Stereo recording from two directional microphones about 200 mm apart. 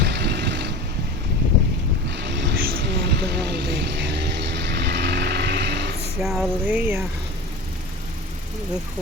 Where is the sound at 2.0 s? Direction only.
60° right (ahead or behind).